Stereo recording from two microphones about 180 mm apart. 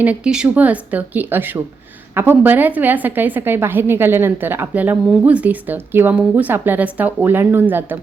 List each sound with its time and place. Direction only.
0.0 s a woman's voice: 5° right (ahead or behind)